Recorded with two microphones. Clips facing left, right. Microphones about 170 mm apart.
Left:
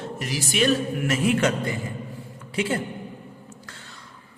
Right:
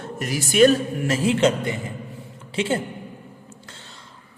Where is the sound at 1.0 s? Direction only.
30° right (ahead or behind).